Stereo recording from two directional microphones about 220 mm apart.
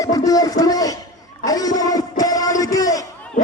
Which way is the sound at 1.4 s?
15° left (ahead or behind).